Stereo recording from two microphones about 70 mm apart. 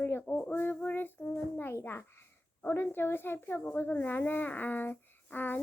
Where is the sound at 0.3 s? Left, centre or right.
Centre.